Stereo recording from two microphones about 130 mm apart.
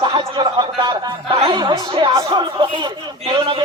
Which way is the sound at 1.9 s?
40° right (ahead or behind).